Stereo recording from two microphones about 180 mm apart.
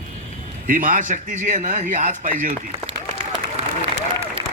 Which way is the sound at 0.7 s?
50° right (ahead or behind).